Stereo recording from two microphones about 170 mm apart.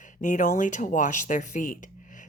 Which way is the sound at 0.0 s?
50° left (ahead or behind).